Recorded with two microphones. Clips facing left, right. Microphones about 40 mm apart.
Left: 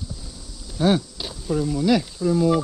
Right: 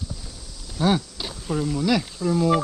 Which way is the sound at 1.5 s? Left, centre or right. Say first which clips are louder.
Left 2 dB; right.